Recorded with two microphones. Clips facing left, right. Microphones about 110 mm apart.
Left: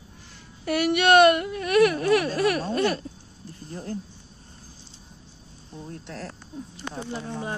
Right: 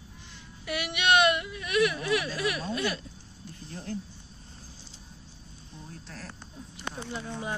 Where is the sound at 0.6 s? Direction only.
45° left (ahead or behind).